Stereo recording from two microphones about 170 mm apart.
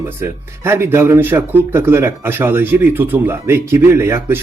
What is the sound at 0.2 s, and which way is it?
Speech, 15° right (ahead or behind).